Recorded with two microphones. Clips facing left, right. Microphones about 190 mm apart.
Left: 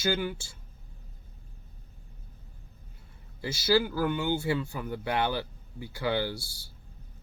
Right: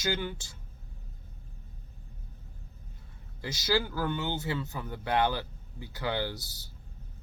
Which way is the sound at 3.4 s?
10° left (ahead or behind).